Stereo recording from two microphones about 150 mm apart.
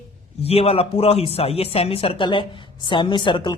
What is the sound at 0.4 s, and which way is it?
Speech, 40° left (ahead or behind).